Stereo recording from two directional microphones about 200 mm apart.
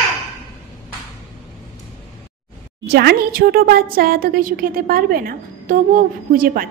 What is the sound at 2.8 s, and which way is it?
A woman's voice, 50° right (ahead or behind).